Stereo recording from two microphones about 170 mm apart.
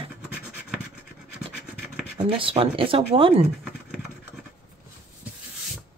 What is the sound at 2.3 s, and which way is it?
Speech, 30° right (ahead or behind).